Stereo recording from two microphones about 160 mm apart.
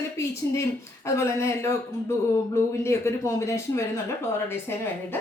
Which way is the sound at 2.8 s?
15° left (ahead or behind).